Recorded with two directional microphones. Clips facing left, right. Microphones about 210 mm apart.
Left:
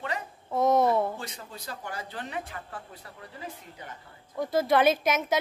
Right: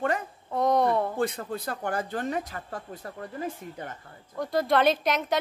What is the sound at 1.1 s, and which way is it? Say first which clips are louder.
Speech: right 12 dB; 55° right (ahead or behind).